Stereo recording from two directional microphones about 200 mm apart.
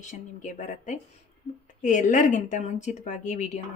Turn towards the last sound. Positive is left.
turn(degrees=40)  # may be behind; listen again after turning